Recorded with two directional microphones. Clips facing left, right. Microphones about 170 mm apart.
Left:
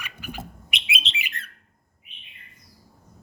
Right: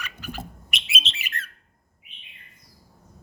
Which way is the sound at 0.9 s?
15° left (ahead or behind).